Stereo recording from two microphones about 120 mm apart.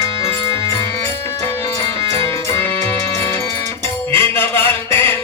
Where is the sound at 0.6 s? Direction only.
25° left (ahead or behind).